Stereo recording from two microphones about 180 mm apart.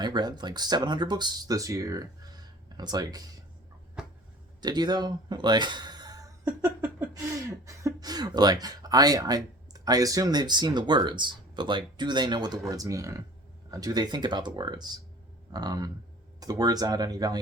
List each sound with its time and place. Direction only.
0.0 s speech: 25° right (ahead or behind)
4.0 s a sound: 5° right (ahead or behind)
4.6 s speech: 25° right (ahead or behind)